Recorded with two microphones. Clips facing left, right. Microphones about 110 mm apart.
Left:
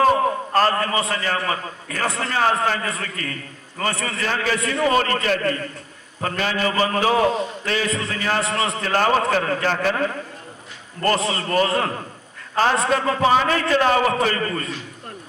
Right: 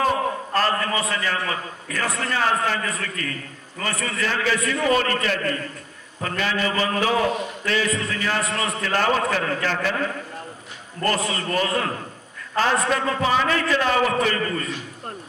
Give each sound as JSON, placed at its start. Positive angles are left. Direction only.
{"t": 0.5, "sound": "a man's voice", "side_deg": 40}
{"t": 2.0, "sound": "a man's voice", "side_deg": 25}
{"t": 2.3, "sound": "a man's voice", "side_deg": 40}
{"t": 11.2, "sound": "a man's voice", "side_deg": 30}